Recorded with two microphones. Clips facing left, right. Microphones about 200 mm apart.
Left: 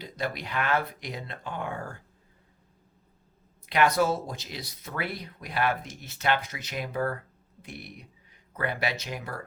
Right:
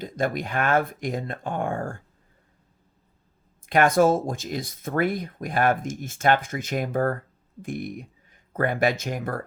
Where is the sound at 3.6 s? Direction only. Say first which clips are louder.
Right 5 dB; 50° right (ahead or behind).